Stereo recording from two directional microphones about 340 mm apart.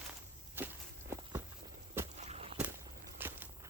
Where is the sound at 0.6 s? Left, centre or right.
Centre.